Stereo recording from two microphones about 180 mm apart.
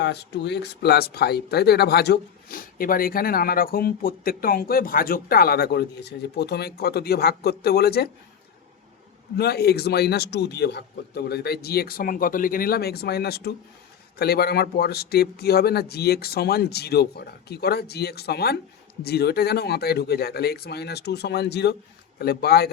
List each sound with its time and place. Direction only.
0.0 s speech: 70° left (ahead or behind)
9.4 s speech: 60° left (ahead or behind)